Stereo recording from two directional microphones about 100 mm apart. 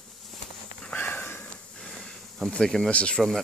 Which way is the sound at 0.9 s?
15° left (ahead or behind).